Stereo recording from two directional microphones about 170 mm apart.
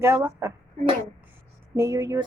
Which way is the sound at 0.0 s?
15° right (ahead or behind).